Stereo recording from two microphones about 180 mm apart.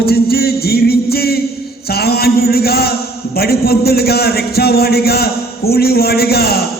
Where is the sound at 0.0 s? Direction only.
60° left (ahead or behind).